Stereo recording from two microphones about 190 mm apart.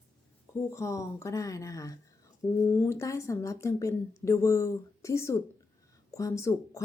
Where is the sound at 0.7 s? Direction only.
15° left (ahead or behind).